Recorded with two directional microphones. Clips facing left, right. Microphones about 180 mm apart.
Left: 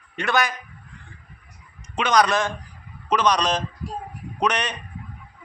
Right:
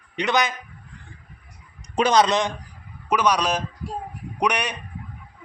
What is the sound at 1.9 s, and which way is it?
A man's voice, 30° right (ahead or behind).